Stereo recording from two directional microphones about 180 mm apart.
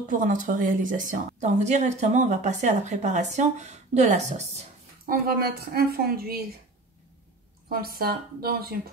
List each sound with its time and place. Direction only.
0.1 s speech: 45° right (ahead or behind)
5.0 s a woman's voice: 55° right (ahead or behind)
7.7 s a woman's voice: 55° right (ahead or behind)